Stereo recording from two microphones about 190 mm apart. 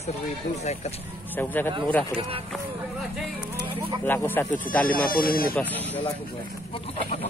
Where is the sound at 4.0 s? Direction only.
10° left (ahead or behind).